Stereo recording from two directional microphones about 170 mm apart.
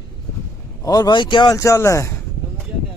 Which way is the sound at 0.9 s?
25° left (ahead or behind).